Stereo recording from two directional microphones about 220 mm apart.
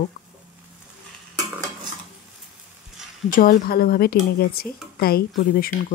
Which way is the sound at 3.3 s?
40° left (ahead or behind).